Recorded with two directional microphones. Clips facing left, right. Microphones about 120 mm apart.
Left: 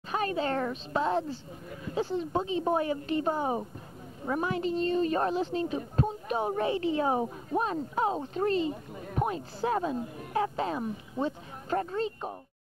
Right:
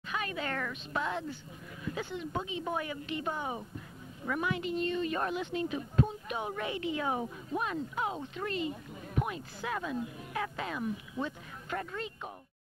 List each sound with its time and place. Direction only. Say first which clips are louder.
0.1 s speech: left 7 dB; 35° left (ahead or behind)